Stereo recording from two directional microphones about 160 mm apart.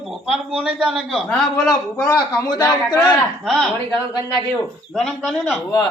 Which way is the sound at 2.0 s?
25° left (ahead or behind).